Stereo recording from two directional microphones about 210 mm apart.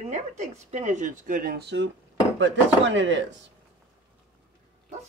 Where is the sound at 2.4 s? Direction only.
60° right (ahead or behind).